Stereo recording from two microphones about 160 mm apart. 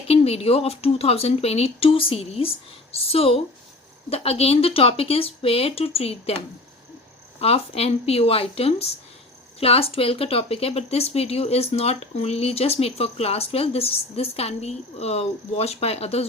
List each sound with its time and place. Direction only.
0.1 s speech: 40° left (ahead or behind)
7.3 s speech: 40° left (ahead or behind)